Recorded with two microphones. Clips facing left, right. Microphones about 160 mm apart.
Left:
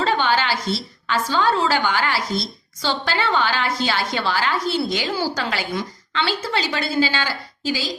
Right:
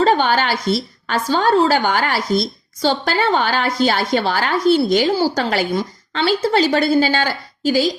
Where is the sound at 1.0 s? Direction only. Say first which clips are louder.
Right 2 dB; 45° right (ahead or behind).